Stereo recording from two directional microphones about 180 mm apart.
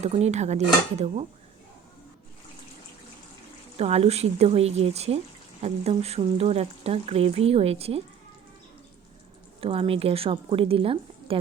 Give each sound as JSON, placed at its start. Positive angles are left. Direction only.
{"t": 0.0, "sound": "speech", "side_deg": -35}
{"t": 3.8, "sound": "speech", "side_deg": -35}
{"t": 9.6, "sound": "speech", "side_deg": -30}